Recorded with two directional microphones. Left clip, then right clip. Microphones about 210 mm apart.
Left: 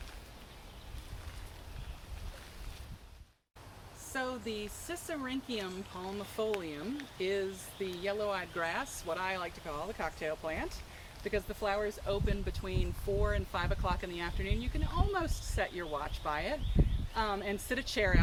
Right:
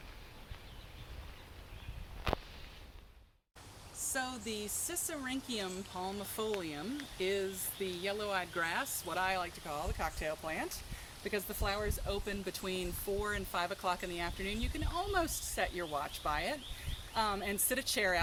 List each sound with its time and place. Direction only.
4.1 s speech: 40° right (ahead or behind)